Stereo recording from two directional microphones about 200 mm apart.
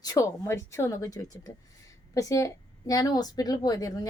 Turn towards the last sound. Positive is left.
turn(degrees=20)  # may be behind; listen again after turning